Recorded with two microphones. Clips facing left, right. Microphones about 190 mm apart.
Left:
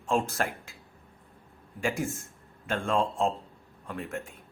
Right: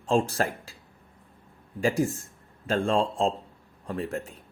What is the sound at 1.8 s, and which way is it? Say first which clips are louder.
Speech: right 5 dB; 35° right (ahead or behind).